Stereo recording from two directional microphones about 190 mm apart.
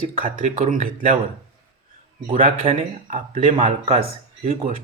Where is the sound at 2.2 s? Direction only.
40° right (ahead or behind).